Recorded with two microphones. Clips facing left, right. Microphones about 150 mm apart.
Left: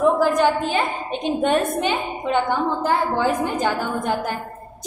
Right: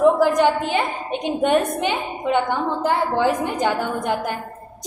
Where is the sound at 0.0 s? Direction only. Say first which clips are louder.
Right 2 dB; 20° right (ahead or behind).